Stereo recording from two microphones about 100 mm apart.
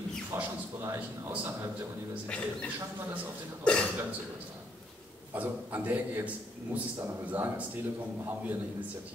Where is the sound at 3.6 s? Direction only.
10° left (ahead or behind).